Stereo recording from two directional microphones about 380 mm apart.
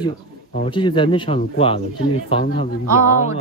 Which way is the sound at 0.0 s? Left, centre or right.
Centre.